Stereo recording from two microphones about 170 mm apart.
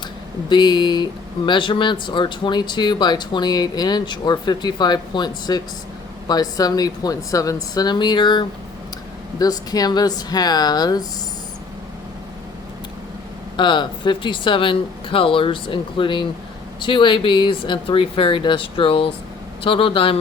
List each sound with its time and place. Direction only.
0.5 s speech: 25° left (ahead or behind)
13.6 s speech: 25° left (ahead or behind)